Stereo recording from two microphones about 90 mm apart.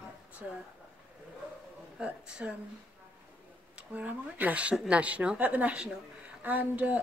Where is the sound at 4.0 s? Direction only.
15° right (ahead or behind).